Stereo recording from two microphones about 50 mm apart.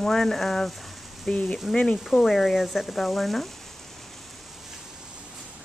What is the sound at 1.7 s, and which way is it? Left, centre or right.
Speech, centre.